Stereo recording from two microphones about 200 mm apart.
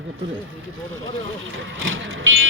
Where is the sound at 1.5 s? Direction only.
70° right (ahead or behind).